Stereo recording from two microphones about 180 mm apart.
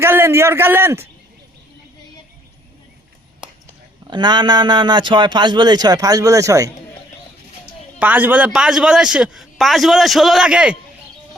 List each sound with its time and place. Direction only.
0.0 s a man's voice: 15° right (ahead or behind)
3.4 s a sound: 5° right (ahead or behind)
4.0 s a man's voice: 25° right (ahead or behind)
7.9 s a man's voice: 10° right (ahead or behind)